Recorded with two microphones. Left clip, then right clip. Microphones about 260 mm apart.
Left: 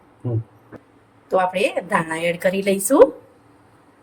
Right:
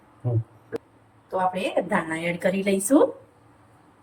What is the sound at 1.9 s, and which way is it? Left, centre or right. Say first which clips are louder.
A woman's voice: left 5 dB; left.